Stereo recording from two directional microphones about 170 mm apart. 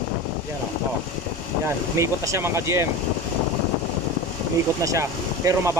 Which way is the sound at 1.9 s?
15° right (ahead or behind).